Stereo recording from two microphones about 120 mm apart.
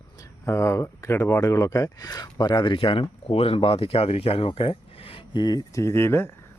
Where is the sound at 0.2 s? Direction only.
25° left (ahead or behind).